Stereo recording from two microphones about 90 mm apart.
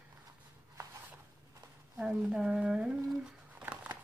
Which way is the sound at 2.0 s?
10° right (ahead or behind).